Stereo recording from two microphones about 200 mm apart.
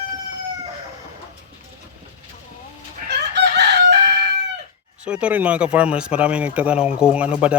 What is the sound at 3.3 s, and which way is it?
Chicken, 55° right (ahead or behind).